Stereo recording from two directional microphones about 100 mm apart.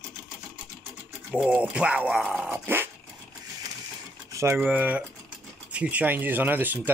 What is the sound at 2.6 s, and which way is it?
Dog, 20° right (ahead or behind).